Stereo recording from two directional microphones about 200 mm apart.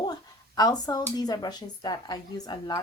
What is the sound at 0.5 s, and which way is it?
Speech, 20° left (ahead or behind).